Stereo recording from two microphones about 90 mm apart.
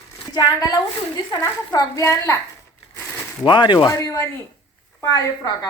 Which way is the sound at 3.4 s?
60° left (ahead or behind).